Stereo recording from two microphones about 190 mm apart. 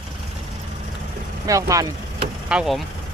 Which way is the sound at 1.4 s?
15° right (ahead or behind).